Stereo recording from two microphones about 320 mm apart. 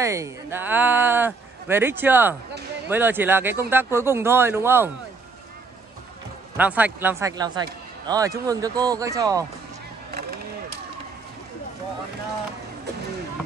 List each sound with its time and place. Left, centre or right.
0.0 s speech: centre
6.5 s speech: centre
10.1 s a sound: right